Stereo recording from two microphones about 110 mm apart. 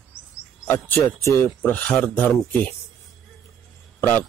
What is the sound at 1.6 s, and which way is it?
Speech, 15° left (ahead or behind).